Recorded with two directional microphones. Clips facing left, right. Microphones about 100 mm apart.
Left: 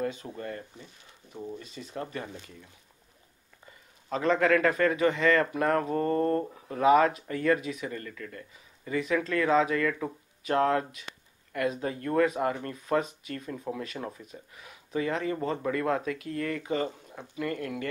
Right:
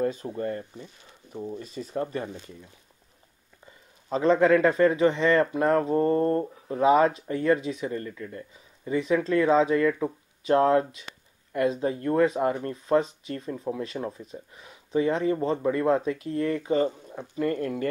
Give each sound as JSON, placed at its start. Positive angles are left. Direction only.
{"t": 0.0, "sound": "speech", "side_deg": -35}
{"t": 2.0, "sound": "speech", "side_deg": -25}
{"t": 4.1, "sound": "speech", "side_deg": -25}
{"t": 13.5, "sound": "speech", "side_deg": -15}
{"t": 14.1, "sound": "speech", "side_deg": -30}